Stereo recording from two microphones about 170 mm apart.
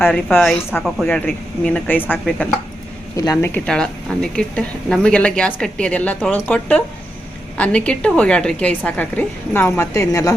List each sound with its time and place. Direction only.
0.0 s a woman's voice: 10° left (ahead or behind)
3.7 s a woman's voice: 5° left (ahead or behind)